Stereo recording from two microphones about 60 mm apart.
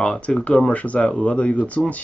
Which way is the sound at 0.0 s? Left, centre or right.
Centre.